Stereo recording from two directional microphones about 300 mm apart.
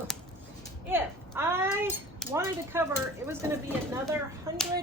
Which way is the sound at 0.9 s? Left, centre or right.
Centre.